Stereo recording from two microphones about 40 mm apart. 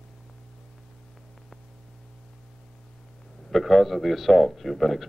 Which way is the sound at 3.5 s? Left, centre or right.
Centre.